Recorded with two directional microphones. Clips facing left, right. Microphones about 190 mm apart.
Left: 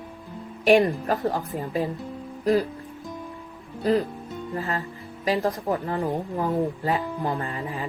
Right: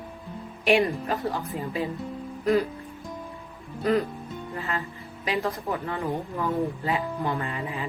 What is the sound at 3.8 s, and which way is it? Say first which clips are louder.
Speech: left 2 dB; 30° left (ahead or behind).